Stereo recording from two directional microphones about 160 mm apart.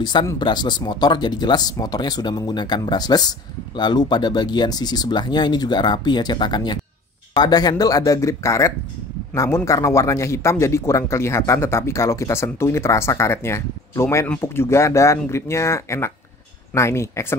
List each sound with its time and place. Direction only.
0.0 s a man's voice: 25° left (ahead or behind)